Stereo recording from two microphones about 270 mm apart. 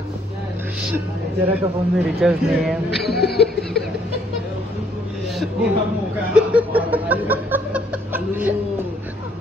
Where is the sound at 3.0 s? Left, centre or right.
Left.